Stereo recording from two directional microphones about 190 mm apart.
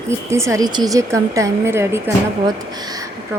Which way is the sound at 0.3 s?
15° right (ahead or behind).